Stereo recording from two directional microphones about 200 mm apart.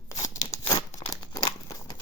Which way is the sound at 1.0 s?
20° left (ahead or behind).